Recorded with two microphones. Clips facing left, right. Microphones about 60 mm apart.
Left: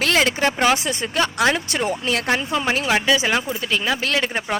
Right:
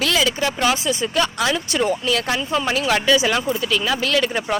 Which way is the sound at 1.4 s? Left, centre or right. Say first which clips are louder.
Even; left.